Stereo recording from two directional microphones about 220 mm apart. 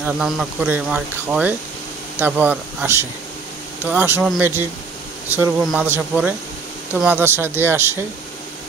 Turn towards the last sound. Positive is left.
turn(degrees=-10)  # may be behind; listen again after turning